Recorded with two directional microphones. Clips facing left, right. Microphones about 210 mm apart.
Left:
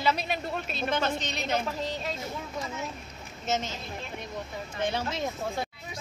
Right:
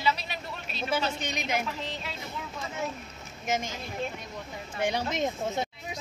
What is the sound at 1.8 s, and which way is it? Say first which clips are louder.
Speech: left 5 dB; 40° left (ahead or behind).